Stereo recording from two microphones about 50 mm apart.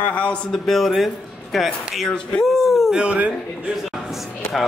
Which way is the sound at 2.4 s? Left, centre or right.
Centre.